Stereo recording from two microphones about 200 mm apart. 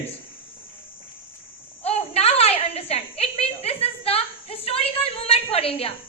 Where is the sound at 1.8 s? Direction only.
30° left (ahead or behind).